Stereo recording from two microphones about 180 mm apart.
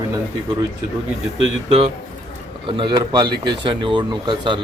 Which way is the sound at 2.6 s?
25° right (ahead or behind).